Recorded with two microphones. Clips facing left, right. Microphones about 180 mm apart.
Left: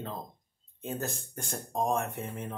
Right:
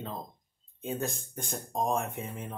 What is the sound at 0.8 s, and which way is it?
Speech, 5° left (ahead or behind).